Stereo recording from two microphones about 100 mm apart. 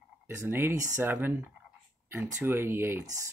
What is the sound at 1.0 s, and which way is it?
Speech, 20° right (ahead or behind).